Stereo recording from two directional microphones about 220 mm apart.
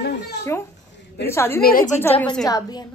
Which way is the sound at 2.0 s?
10° left (ahead or behind).